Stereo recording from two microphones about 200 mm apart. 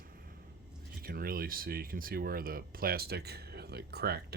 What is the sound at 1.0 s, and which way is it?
Speech, 45° right (ahead or behind).